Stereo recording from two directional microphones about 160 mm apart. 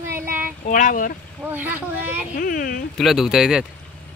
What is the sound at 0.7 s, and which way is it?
Speech, 55° left (ahead or behind).